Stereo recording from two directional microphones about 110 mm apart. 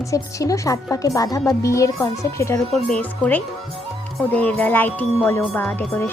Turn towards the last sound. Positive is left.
turn(degrees=15)  # may be behind; listen again after turning